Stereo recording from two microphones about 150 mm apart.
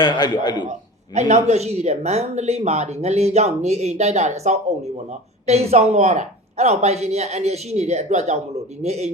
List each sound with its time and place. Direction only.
0.0 s a man's voice: 30° left (ahead or behind)
0.7 s a man's voice: 50° right (ahead or behind)